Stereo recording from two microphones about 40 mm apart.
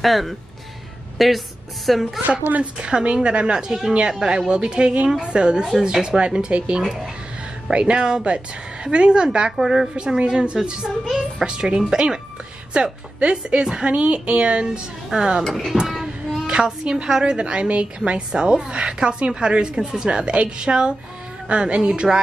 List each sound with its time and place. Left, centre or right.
0.0 s a woman's voice: centre
2.8 s a woman's voice: right
5.7 s speech: centre
6.1 s a woman's voice: right
9.6 s speech: centre
9.9 s a woman's voice: right
11.1 s speech: centre
11.4 s a woman's voice: right
15.1 s speech: centre
15.4 s speech: centre
16.6 s a woman's voice: centre
18.3 s a woman's voice: centre